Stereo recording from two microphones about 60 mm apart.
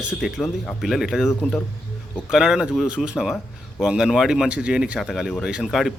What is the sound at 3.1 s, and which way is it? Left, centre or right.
Speech, centre.